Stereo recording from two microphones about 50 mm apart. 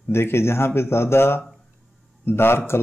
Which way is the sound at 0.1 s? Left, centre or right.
Left.